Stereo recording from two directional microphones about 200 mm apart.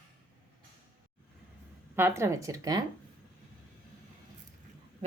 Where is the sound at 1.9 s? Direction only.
10° right (ahead or behind).